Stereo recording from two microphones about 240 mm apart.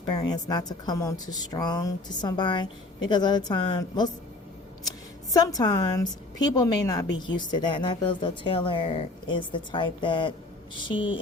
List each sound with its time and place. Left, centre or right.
0.0 s speech: centre
5.3 s speech: centre